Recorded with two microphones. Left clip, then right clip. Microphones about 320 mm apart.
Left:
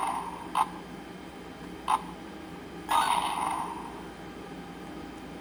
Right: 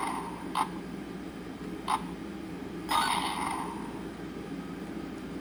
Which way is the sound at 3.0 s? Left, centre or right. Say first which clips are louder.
Left 3 dB; centre.